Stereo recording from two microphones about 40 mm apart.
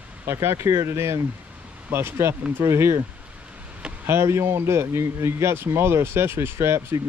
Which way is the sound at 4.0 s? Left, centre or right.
Right.